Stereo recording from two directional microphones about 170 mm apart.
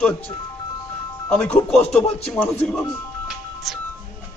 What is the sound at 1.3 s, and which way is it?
A man's voice, 5° left (ahead or behind).